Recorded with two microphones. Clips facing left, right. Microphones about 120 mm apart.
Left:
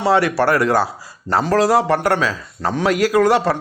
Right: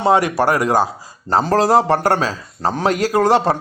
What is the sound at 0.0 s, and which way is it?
Speech, 20° right (ahead or behind).